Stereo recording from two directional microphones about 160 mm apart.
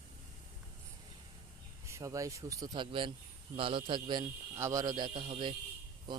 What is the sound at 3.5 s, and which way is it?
Speech, 35° right (ahead or behind).